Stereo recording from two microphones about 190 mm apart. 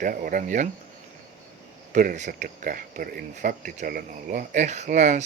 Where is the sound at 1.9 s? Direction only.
40° right (ahead or behind).